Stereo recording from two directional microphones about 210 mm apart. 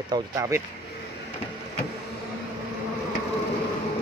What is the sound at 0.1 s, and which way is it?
Speech, 15° right (ahead or behind).